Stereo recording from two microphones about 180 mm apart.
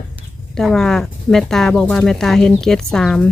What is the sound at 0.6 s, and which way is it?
Speech, centre (ahead or behind).